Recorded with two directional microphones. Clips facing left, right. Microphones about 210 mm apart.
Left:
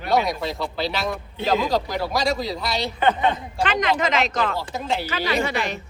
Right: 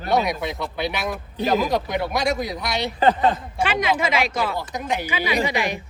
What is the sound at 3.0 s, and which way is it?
Speech, 35° right (ahead or behind).